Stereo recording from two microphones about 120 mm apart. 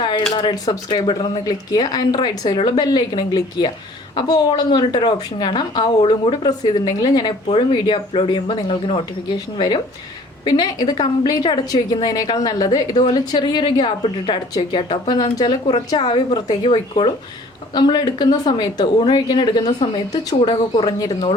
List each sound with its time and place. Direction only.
0.3 s a woman's voice: 35° left (ahead or behind)
7.4 s a woman's voice: 50° left (ahead or behind)
16.6 s speech: 50° left (ahead or behind)
17.7 s a woman's voice: 35° left (ahead or behind)